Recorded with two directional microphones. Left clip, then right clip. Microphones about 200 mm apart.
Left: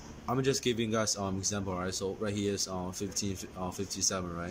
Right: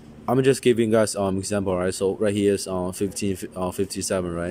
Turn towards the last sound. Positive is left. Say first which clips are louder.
# right 8 dB
turn(degrees=-40)  # may be behind; listen again after turning